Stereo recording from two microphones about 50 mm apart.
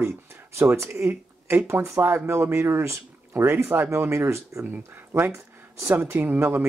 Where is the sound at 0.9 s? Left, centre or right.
Right.